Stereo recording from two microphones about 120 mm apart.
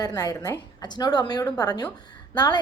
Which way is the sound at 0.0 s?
30° left (ahead or behind).